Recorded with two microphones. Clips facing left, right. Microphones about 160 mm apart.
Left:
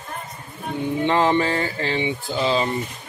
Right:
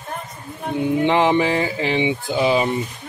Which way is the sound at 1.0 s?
15° right (ahead or behind).